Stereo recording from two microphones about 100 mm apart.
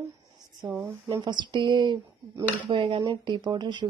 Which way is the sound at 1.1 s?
40° right (ahead or behind).